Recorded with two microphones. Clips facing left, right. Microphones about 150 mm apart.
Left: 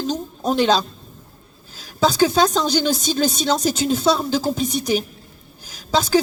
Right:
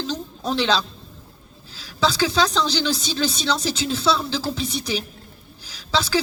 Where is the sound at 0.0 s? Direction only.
45° left (ahead or behind).